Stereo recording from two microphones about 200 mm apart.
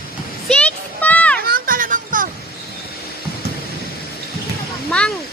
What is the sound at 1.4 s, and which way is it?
Music, 45° right (ahead or behind).